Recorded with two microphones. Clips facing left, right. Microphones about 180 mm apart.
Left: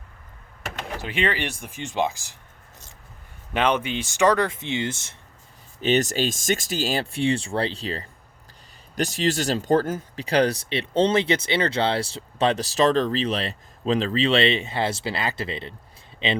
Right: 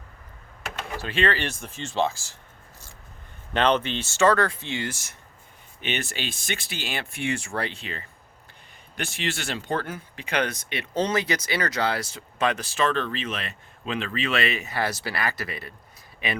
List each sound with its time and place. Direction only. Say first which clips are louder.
1.0 s speech: right 1 dB; 15° left (ahead or behind)
3.5 s speech: even; 10° left (ahead or behind)
5.8 s speech: left 10 dB; 40° left (ahead or behind); by 16.4 s 25° left (ahead or behind)